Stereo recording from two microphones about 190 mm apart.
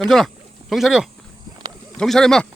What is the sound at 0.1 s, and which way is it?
Speech, centre (ahead or behind).